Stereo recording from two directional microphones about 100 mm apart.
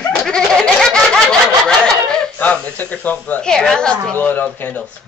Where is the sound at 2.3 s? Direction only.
15° left (ahead or behind).